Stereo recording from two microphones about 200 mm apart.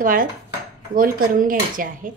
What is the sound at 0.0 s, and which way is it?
A woman's voice, 45° right (ahead or behind).